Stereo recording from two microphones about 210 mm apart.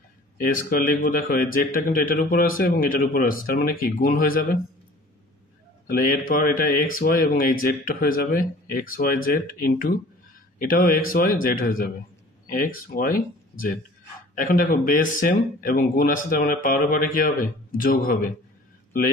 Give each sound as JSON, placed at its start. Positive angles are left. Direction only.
{"t": 0.5, "sound": "speech", "side_deg": 40}
{"t": 5.9, "sound": "speech", "side_deg": 40}